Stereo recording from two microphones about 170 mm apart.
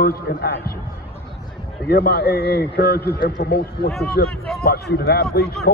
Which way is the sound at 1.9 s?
70° left (ahead or behind).